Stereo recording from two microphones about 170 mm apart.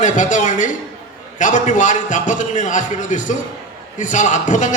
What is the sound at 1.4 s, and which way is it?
A man's voice, 50° left (ahead or behind).